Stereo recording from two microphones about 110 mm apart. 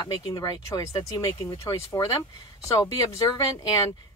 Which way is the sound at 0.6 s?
30° left (ahead or behind).